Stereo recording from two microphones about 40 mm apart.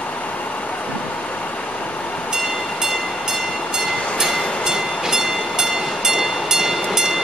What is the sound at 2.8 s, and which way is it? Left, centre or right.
Train, centre.